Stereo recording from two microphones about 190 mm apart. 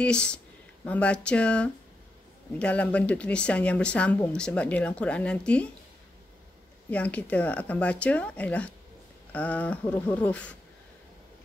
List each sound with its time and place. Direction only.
0.0 s speech: 5° left (ahead or behind)
6.9 s speech: 5° left (ahead or behind)